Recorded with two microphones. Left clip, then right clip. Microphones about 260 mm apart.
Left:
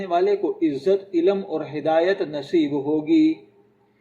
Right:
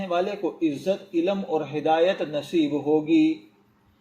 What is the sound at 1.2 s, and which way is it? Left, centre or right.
Speech, centre.